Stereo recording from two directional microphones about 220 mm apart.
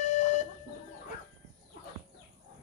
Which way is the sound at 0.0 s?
30° left (ahead or behind).